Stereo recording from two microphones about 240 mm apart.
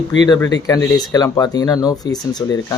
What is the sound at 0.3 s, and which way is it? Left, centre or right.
Speech, centre.